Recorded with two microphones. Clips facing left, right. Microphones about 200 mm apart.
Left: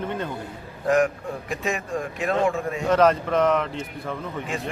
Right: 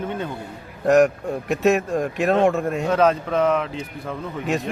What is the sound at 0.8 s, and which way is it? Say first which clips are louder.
A man's voice: right 5 dB; 70° right (ahead or behind).